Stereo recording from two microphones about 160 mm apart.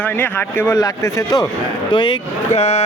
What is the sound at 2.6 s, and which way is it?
Speech, 40° left (ahead or behind).